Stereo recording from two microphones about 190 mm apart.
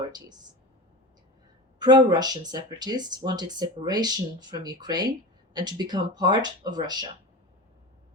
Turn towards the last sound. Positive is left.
turn(degrees=-20)  # may be behind; listen again after turning